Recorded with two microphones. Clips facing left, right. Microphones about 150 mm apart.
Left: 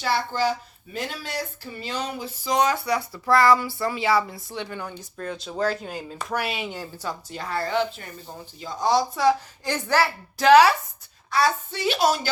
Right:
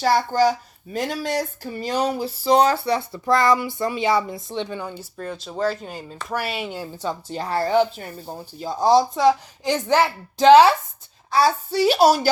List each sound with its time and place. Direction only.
0.0 s a woman's voice: 40° right (ahead or behind); by 6.8 s 5° right (ahead or behind)
7.0 s a woman's voice: 25° right (ahead or behind)